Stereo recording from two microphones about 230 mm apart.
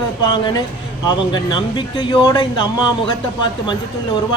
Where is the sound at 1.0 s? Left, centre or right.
Centre.